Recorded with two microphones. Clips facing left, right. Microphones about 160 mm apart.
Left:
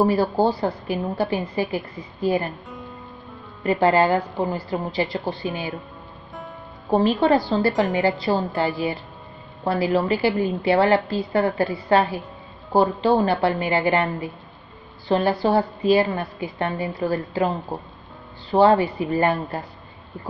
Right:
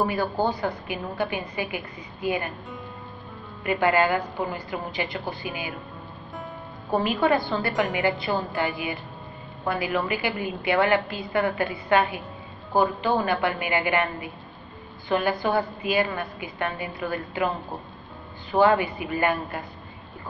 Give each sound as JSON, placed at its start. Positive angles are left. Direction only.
{"t": 0.0, "sound": "a woman's voice", "side_deg": 35}
{"t": 3.6, "sound": "a woman's voice", "side_deg": 35}
{"t": 6.9, "sound": "a woman's voice", "side_deg": 35}
{"t": 9.7, "sound": "a woman's voice", "side_deg": 35}